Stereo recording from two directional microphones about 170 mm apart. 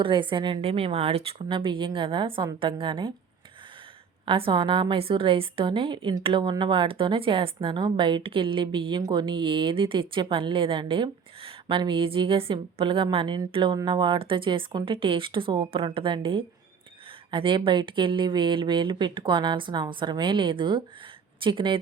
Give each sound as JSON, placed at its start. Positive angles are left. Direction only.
{"t": 0.0, "sound": "speech", "side_deg": -30}
{"t": 4.3, "sound": "a woman's voice", "side_deg": -30}